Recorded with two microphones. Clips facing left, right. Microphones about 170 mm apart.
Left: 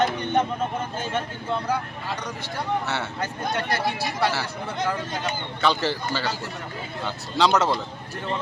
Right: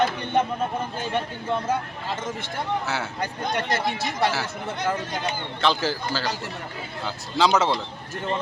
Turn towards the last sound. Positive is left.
turn(degrees=0)  # may be behind; listen again after turning